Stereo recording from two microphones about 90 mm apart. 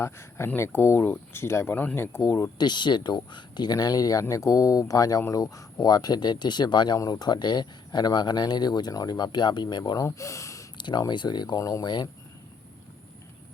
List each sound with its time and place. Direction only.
0.0 s speech: 30° left (ahead or behind)
2.6 s speech: 55° left (ahead or behind)
10.0 s speech: 35° left (ahead or behind)
10.8 s speech: 55° left (ahead or behind)
11.6 s speech: 40° left (ahead or behind)